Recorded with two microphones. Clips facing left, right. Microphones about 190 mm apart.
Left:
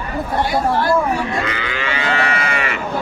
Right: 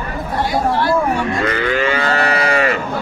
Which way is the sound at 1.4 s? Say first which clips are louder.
Right 7 dB; 50° right (ahead or behind).